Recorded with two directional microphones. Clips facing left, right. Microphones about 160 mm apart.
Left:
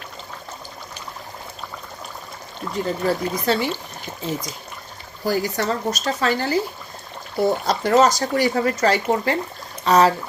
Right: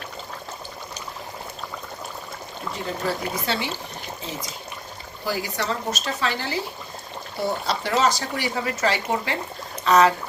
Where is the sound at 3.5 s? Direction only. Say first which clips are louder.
Left 7 dB; 45° left (ahead or behind).